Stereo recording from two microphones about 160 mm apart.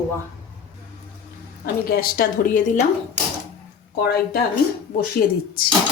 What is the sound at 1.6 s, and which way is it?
A woman's voice, 70° left (ahead or behind).